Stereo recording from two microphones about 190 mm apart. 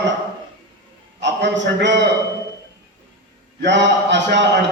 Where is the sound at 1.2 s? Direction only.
70° right (ahead or behind).